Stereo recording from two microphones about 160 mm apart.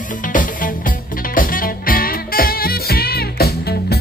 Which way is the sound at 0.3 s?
55° left (ahead or behind).